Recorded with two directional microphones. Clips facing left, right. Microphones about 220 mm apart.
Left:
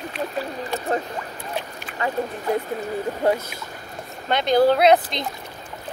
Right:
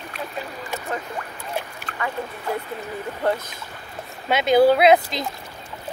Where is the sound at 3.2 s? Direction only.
10° left (ahead or behind).